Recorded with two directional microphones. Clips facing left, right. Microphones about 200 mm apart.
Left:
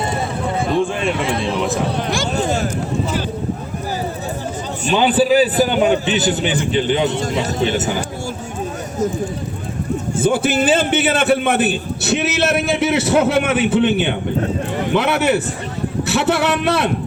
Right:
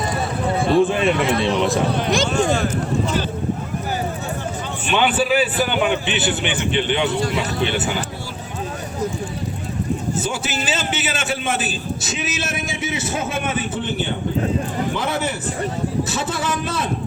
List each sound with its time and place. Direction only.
0.7 s a man's voice: 5° right (ahead or behind)
2.3 s a man's voice: 40° left (ahead or behind)
4.9 s a man's voice: 35° left (ahead or behind)
10.2 s a man's voice: 55° left (ahead or behind)